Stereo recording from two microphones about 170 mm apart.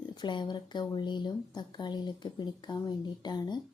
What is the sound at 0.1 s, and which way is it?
A woman's voice, 25° left (ahead or behind).